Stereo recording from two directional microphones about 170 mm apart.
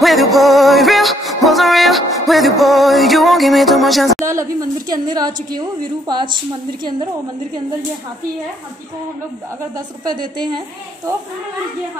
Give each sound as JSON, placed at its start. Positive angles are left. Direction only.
{"t": 0.0, "sound": "music", "side_deg": 0}
{"t": 4.3, "sound": "a woman's voice", "side_deg": -15}
{"t": 10.0, "sound": "a woman's voice", "side_deg": -25}